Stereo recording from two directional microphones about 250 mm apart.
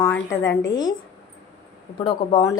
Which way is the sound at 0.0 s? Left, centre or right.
Centre.